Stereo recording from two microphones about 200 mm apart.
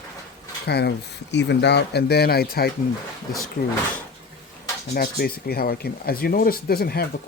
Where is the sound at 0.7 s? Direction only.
55° left (ahead or behind).